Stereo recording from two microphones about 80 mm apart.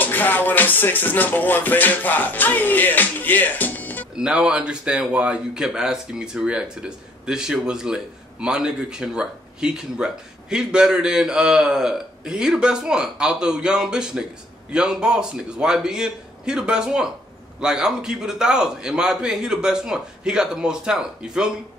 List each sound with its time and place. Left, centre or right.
0.0 s music: left
4.1 s speech: centre